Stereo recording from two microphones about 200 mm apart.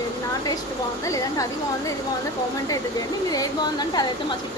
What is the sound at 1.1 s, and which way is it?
Speech, 15° left (ahead or behind).